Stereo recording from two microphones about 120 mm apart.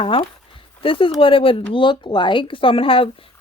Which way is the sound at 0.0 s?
50° left (ahead or behind).